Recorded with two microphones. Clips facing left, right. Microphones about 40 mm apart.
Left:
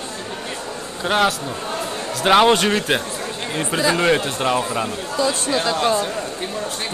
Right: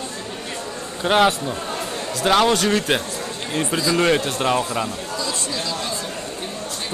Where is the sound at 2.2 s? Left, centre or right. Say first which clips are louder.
Left 3 dB; left.